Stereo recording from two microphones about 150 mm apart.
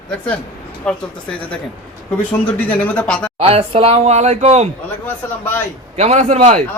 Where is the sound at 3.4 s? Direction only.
40° right (ahead or behind).